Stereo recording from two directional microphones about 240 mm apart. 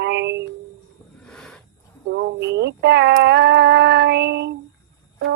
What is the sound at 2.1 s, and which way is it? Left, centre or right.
Speech, right.